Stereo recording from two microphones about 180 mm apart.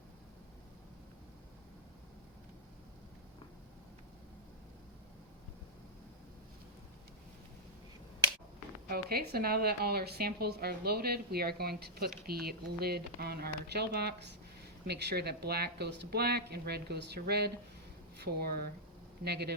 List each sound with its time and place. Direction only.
8.9 s a woman's voice: 60° right (ahead or behind)